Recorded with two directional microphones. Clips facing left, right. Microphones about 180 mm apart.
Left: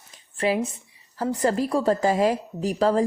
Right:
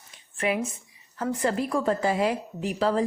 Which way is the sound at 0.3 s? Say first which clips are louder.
Left 3 dB; 30° left (ahead or behind).